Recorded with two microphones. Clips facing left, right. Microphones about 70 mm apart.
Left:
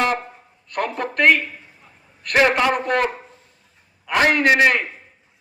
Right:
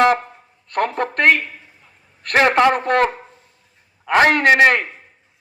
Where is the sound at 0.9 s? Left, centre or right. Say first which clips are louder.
Even; right.